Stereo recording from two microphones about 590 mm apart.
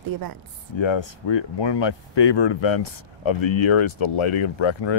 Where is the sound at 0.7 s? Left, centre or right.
Left.